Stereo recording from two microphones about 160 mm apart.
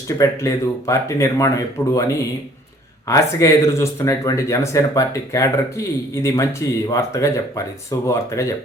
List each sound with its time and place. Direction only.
0.2 s speech: 20° left (ahead or behind)
3.1 s speech: 20° left (ahead or behind)